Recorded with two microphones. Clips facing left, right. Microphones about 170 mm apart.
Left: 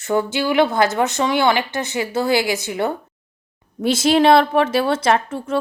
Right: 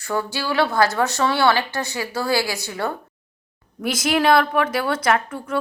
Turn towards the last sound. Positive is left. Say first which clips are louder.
# left 3 dB
turn(degrees=25)  # may be behind; listen again after turning